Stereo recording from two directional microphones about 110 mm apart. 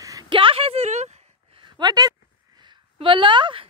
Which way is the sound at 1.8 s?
40° right (ahead or behind).